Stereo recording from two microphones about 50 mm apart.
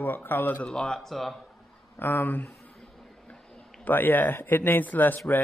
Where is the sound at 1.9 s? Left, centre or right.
Left.